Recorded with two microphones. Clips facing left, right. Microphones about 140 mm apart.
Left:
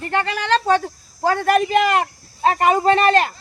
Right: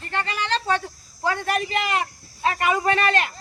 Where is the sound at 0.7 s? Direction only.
40° left (ahead or behind).